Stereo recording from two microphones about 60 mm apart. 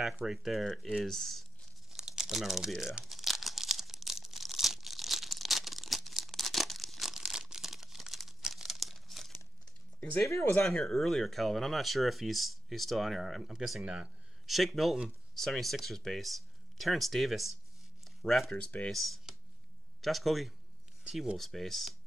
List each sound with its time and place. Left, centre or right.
0.2 s speech: centre
1.9 s crumpling: centre
2.8 s speech: centre
3.1 s crumpling: centre
10.6 s speech: centre
18.0 s a sound: centre
18.5 s speech: left
18.9 s speech: centre
21.4 s speech: centre